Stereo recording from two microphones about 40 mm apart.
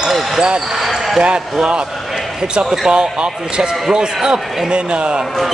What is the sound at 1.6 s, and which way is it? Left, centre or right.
Speech, right.